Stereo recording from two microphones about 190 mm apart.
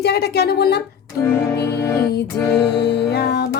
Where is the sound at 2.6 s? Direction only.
60° left (ahead or behind).